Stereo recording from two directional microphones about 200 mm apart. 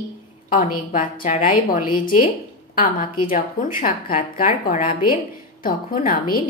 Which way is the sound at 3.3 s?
40° left (ahead or behind).